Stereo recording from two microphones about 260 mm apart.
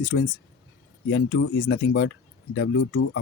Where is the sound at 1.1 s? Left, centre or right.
Left.